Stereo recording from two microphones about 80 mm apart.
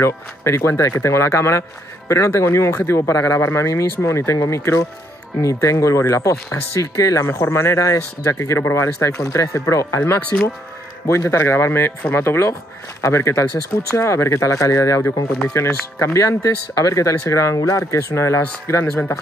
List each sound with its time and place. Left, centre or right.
0.0 s speech: left